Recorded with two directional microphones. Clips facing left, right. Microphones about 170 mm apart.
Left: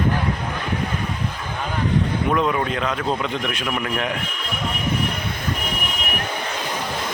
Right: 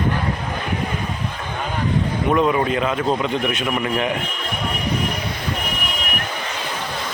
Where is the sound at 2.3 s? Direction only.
5° right (ahead or behind).